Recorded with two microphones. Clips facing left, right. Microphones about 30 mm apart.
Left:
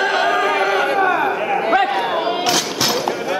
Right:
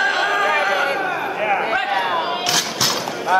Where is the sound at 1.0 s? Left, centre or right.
Centre.